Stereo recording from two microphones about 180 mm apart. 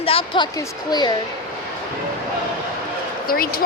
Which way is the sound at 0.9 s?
25° left (ahead or behind).